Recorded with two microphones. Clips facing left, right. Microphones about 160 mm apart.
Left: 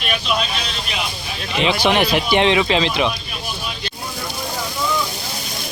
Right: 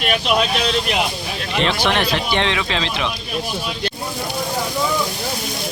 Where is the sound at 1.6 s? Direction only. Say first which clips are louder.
Left 3 dB; 5° left (ahead or behind).